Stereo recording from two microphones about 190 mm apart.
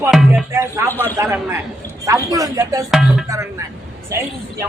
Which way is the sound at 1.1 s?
15° right (ahead or behind).